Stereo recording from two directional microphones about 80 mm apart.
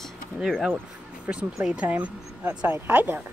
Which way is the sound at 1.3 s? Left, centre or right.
Centre.